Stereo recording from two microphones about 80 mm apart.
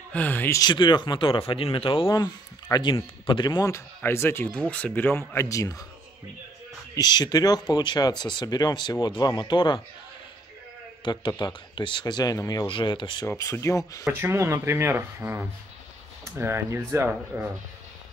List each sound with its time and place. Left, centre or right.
0.1 s speech: left
0.6 s speech: left
2.1 s speech: left
4.0 s speech: left
4.5 s speech: centre
5.3 s speech: left
7.0 s speech: left
11.1 s speech: left
12.6 s speech: left
13.4 s speech: left
14.0 s speech: right